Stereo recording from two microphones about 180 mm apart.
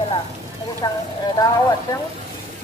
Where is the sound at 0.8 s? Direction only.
20° left (ahead or behind).